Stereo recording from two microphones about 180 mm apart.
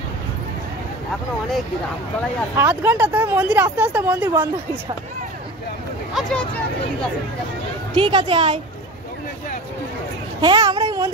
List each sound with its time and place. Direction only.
2.5 s speech: 15° right (ahead or behind)
7.9 s a woman's voice: 25° right (ahead or behind)
10.4 s a child's voice: 25° right (ahead or behind)